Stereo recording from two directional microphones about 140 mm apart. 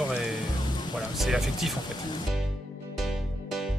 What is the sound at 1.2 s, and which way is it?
Speech, centre (ahead or behind).